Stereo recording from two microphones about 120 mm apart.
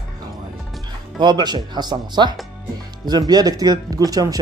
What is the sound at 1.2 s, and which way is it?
Speech, 35° right (ahead or behind).